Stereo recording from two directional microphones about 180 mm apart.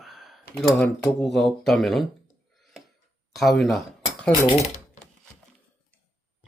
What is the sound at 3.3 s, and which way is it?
Speech, centre (ahead or behind).